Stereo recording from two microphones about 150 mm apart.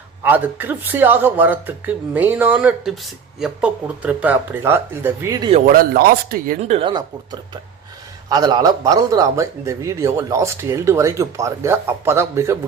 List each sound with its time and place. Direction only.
0.2 s speech: 10° right (ahead or behind)
5.6 s speech: 75° right (ahead or behind)
6.6 s speech: 45° right (ahead or behind)
8.3 s a man's voice: 25° right (ahead or behind)